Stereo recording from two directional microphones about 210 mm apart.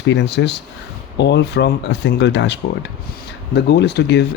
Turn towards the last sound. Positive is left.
turn(degrees=50)  # may be behind; listen again after turning